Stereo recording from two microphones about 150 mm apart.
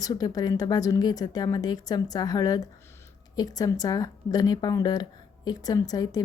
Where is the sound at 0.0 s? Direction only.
25° left (ahead or behind).